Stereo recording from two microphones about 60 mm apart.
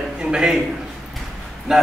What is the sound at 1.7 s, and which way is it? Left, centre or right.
Speech, centre.